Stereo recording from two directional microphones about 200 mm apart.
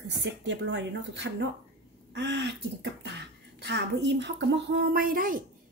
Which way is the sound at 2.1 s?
60° right (ahead or behind).